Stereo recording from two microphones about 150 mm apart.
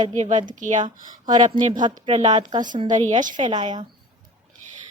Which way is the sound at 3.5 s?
35° right (ahead or behind).